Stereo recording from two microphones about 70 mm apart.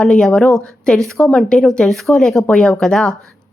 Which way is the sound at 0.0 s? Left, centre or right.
Centre.